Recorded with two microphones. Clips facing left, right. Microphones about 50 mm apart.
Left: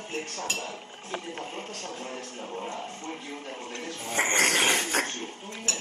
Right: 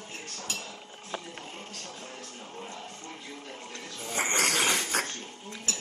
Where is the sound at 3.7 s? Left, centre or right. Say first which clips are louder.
Left 4 dB; left.